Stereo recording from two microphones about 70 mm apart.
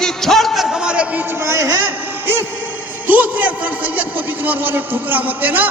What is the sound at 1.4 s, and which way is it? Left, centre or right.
Speech, right.